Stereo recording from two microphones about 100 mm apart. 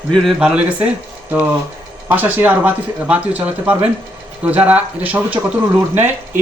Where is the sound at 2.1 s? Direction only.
15° right (ahead or behind).